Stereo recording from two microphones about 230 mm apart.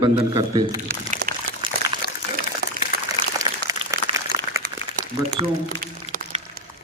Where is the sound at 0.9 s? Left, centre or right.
Right.